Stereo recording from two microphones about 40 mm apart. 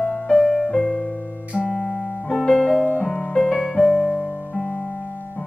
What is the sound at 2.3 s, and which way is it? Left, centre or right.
Piano, centre.